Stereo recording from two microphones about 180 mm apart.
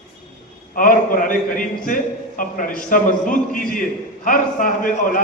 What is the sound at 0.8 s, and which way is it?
A man's voice, 50° left (ahead or behind).